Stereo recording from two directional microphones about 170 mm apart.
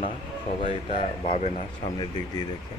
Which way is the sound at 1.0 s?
45° left (ahead or behind).